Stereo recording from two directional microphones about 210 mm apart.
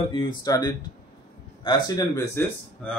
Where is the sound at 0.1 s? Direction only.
20° left (ahead or behind).